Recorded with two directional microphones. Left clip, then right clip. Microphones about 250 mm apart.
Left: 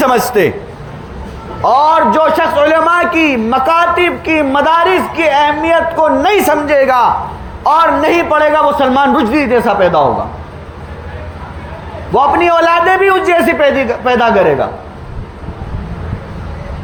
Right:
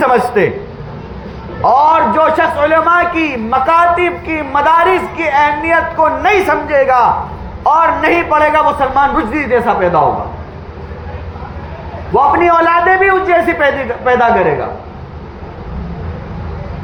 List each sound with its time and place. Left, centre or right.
0.0 s a man's voice: left
1.6 s a man's voice: left
12.1 s a man's voice: left